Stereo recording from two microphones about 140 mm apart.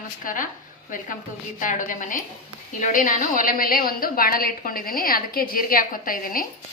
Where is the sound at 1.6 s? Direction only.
70° left (ahead or behind); by 6.5 s 85° left.